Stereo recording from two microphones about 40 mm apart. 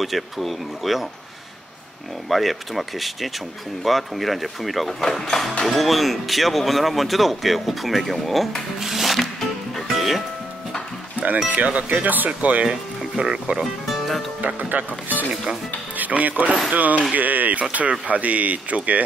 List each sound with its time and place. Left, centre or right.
0.0 s speech: centre
2.2 s speech: centre
5.0 s speech: centre
8.7 s music: centre
11.4 s speech: right
12.6 s speech: centre
13.8 s music: centre
14.4 s speech: right
16.0 s speech: right